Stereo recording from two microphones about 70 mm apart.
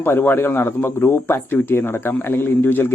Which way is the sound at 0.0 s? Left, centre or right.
Left.